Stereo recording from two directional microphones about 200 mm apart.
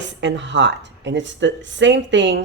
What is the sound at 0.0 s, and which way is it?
Speech, 60° right (ahead or behind).